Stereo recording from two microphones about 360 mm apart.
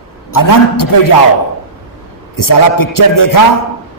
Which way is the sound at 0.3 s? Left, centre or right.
Left.